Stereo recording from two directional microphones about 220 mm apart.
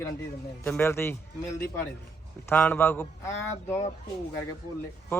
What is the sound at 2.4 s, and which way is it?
Speech, 10° left (ahead or behind).